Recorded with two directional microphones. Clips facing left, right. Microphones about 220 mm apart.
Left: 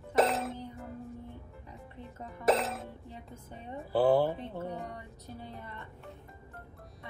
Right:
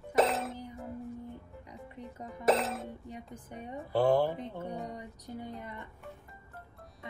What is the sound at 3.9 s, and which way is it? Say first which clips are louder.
Speech: left 1 dB; 5° left (ahead or behind).